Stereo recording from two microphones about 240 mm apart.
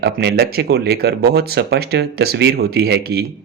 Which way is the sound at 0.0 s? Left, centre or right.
Right.